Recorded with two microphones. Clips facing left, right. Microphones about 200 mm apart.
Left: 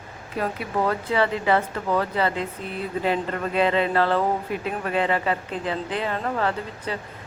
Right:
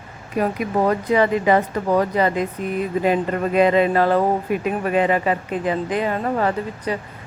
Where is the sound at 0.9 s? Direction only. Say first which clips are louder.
Right 6 dB; 15° right (ahead or behind).